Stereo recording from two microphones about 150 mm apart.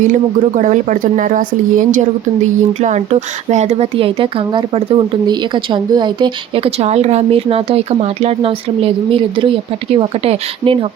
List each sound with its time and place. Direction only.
0.5 s speech: 55° right (ahead or behind)
2.8 s speech: 50° right (ahead or behind)